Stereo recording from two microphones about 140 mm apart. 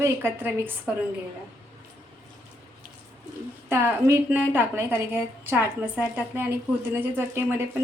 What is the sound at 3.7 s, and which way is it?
A woman's voice, 15° right (ahead or behind).